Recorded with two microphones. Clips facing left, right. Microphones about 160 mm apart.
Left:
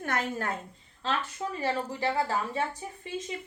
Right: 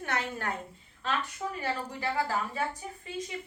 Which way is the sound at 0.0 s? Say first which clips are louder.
Left 2 dB; 45° left (ahead or behind).